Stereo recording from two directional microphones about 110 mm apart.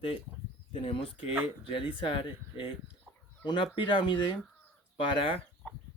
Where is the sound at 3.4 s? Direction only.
50° left (ahead or behind).